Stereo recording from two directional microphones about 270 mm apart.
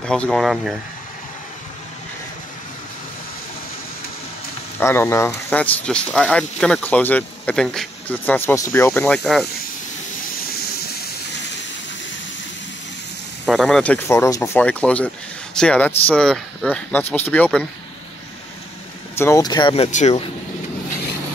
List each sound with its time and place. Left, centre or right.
0.0 s speech: centre
4.7 s speech: centre
13.5 s speech: centre
19.1 s speech: centre